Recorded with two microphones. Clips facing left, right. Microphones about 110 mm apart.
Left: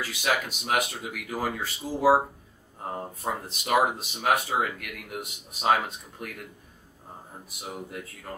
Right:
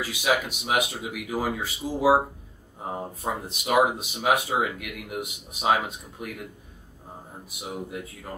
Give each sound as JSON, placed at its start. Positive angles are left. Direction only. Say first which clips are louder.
{"t": 0.0, "sound": "speech", "louder": "right 3 dB", "side_deg": -5}
{"t": 7.4, "sound": "speech", "louder": "right 3 dB", "side_deg": -5}